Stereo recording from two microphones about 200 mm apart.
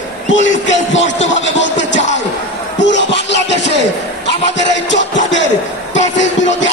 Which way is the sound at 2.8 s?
60° left (ahead or behind).